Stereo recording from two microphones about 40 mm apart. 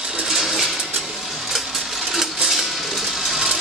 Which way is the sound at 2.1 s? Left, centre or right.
Centre.